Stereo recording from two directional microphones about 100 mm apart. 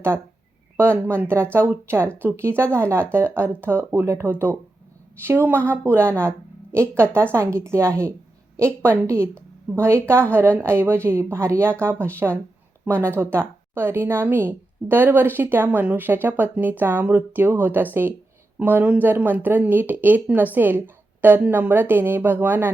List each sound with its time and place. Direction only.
0.8 s a woman's voice: 25° right (ahead or behind)